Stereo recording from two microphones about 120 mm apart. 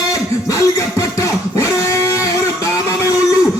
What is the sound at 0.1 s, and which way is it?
Music, 25° left (ahead or behind).